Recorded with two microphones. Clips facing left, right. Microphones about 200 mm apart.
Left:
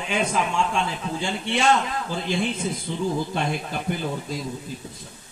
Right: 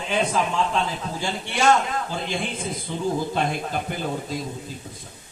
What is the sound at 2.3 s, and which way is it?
Mantra, 50° right (ahead or behind).